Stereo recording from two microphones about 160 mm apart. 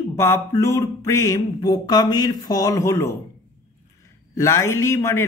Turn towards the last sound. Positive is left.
turn(degrees=15)  # may be behind; listen again after turning